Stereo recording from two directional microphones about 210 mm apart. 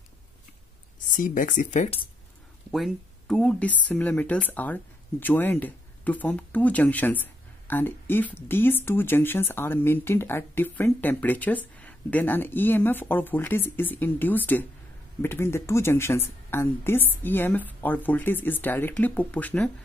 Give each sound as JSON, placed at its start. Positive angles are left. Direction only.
{"t": 1.1, "sound": "speech", "side_deg": 40}
{"t": 2.7, "sound": "speech", "side_deg": 0}